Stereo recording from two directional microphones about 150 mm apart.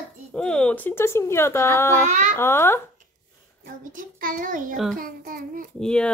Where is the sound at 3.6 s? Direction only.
65° right (ahead or behind).